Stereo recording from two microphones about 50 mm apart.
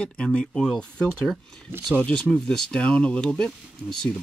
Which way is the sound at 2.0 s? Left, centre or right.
Left.